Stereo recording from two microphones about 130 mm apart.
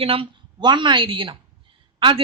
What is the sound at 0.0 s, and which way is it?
A woman's voice, 45° right (ahead or behind).